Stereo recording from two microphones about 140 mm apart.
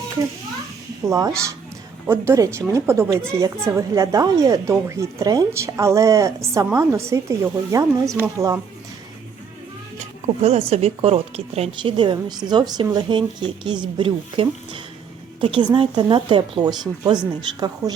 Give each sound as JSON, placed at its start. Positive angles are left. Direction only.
{"t": 1.0, "sound": "speech", "side_deg": -25}
{"t": 10.4, "sound": "a woman's voice", "side_deg": -45}